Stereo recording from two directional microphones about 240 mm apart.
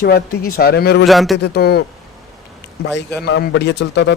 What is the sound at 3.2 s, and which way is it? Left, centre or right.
Speech, left.